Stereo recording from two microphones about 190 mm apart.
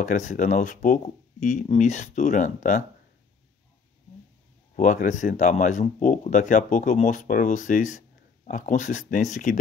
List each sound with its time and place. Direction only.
0.0 s speech: 40° left (ahead or behind)
4.7 s speech: 40° left (ahead or behind)